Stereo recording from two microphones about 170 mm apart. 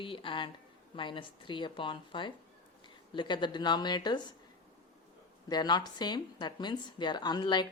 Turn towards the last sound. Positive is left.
turn(degrees=25)  # may be behind; listen again after turning